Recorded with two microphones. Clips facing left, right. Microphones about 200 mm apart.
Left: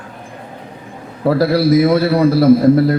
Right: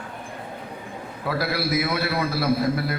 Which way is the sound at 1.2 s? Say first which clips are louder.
Left 13 dB; 40° left (ahead or behind).